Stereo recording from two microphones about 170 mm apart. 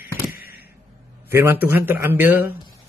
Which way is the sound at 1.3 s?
15° right (ahead or behind).